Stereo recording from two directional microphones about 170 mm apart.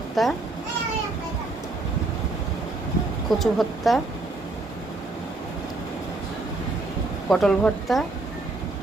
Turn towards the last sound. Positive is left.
turn(degrees=5)  # may be behind; listen again after turning